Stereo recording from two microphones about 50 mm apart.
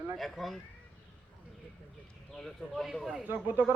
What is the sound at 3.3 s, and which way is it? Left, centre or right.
Speech, right.